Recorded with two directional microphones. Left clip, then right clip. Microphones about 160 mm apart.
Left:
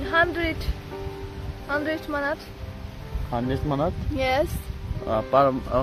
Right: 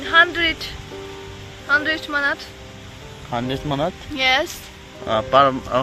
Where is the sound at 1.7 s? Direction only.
20° left (ahead or behind).